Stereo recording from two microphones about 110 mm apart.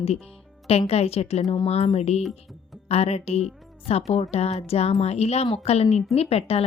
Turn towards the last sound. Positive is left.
turn(degrees=65)  # may be behind; listen again after turning